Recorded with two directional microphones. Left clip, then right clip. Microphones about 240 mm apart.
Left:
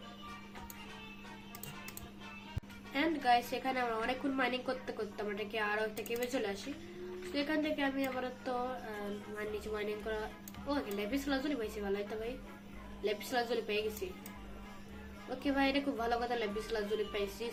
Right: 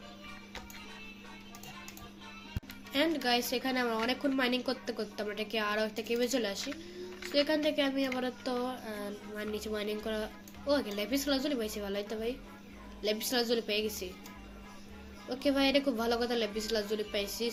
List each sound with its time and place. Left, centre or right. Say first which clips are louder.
2.9 s a woman's voice: right 1 dB; right
15.4 s a woman's voice: right 5 dB; right